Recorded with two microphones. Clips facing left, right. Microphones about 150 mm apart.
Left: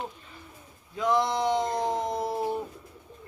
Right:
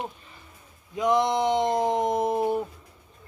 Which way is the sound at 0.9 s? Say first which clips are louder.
Right 3 dB; 20° right (ahead or behind).